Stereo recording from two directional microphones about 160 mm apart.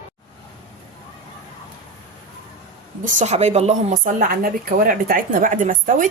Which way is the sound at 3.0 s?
50° right (ahead or behind).